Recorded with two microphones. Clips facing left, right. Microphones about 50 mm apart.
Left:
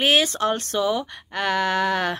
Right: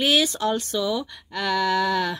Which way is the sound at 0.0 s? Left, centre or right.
Left.